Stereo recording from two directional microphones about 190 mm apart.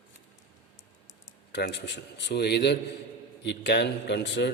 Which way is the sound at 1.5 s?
65° left (ahead or behind).